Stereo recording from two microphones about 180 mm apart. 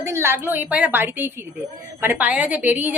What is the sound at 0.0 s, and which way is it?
A woman's voice, 15° right (ahead or behind).